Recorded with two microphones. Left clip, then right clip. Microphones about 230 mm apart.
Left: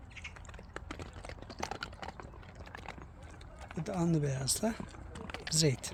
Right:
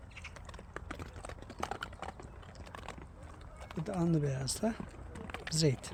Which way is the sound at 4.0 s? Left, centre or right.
Centre.